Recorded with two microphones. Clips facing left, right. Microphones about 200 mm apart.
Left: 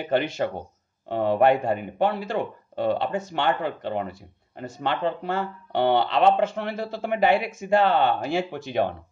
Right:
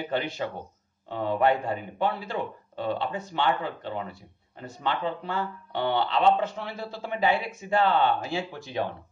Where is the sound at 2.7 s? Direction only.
65° left (ahead or behind); by 7.6 s 85° left.